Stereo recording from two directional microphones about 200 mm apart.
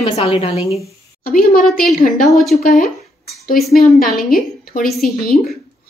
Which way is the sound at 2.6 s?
40° left (ahead or behind).